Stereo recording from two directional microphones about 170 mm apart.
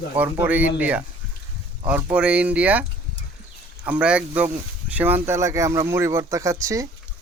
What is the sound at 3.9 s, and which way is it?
Speech, 5° right (ahead or behind).